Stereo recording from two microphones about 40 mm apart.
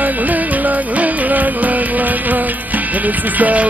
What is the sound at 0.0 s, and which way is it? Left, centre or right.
Music, right.